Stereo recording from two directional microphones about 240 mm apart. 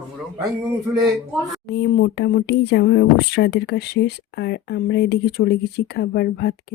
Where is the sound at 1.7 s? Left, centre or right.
Left.